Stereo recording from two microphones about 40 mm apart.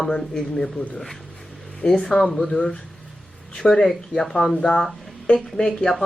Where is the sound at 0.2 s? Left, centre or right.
Centre.